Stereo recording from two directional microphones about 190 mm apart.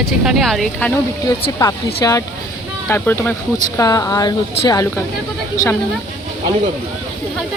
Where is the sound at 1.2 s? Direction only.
20° left (ahead or behind).